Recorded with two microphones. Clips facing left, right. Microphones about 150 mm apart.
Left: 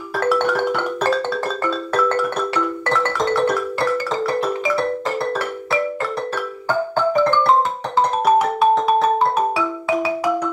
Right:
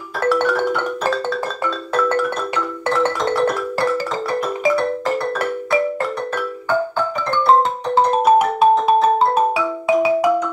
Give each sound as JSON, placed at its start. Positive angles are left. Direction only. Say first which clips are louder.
{"t": 2.0, "sound": "music", "louder": "even", "side_deg": -15}
{"t": 8.3, "sound": "music", "louder": "right 1 dB", "side_deg": -20}